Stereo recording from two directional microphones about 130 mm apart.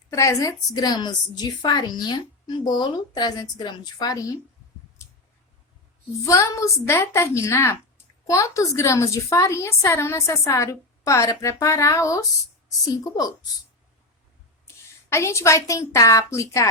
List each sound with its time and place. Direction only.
0.2 s a woman's voice: 25° left (ahead or behind)
6.2 s a woman's voice: 25° left (ahead or behind)
15.1 s a woman's voice: 20° left (ahead or behind)